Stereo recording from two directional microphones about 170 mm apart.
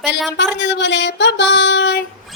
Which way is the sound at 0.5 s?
90° left.